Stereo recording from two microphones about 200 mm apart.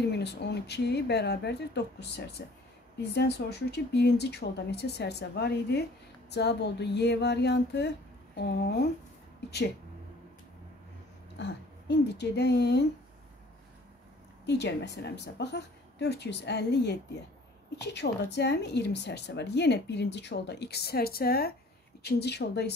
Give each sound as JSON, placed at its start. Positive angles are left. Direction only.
{"t": 0.1, "sound": "a woman's voice", "side_deg": 55}
{"t": 11.3, "sound": "speech", "side_deg": 55}
{"t": 14.4, "sound": "a woman's voice", "side_deg": 55}
{"t": 17.9, "sound": "a woman's voice", "side_deg": 60}